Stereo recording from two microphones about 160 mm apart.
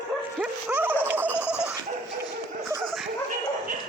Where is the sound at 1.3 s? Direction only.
15° left (ahead or behind).